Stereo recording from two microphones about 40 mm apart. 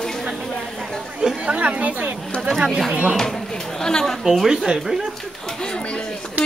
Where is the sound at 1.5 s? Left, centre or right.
Right.